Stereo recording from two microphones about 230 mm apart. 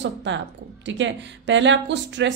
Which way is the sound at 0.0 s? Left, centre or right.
Right.